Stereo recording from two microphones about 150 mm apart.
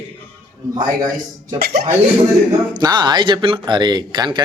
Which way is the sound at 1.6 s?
90° right.